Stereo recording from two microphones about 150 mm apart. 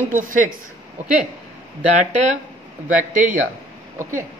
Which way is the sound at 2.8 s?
60° right (ahead or behind).